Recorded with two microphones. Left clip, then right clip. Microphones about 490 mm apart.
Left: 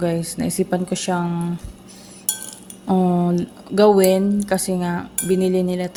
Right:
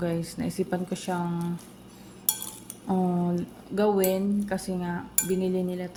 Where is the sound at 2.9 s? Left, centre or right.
Right.